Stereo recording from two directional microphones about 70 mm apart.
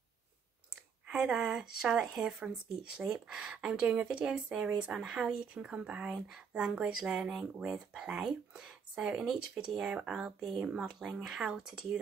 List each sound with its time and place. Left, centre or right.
1.0 s speech: centre
3.8 s speech: right
4.1 s speech: centre